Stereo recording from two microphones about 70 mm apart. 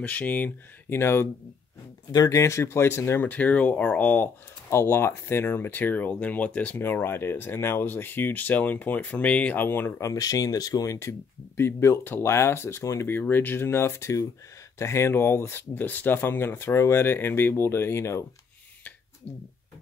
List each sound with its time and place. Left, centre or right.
0.0 s speech: left
0.9 s speech: left
2.1 s speech: left
3.3 s speech: left
4.6 s speech: left; by 6.8 s centre
6.8 s speech: left
9.6 s speech: left
10.1 s speech: left
11.0 s speech: left
13.1 s speech: left
15.7 s speech: left